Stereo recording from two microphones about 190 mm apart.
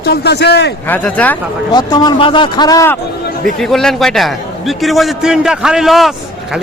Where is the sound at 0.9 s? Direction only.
10° left (ahead or behind).